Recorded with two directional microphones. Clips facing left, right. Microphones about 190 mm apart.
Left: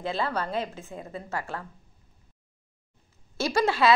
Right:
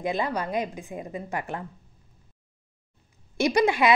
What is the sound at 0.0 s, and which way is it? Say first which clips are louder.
A woman's voice: right 2 dB; 15° right (ahead or behind).